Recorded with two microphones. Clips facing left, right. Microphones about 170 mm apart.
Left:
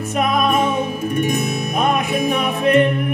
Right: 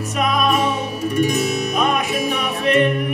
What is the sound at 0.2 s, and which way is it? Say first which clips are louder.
Music: left 1 dB; 55° left (ahead or behind).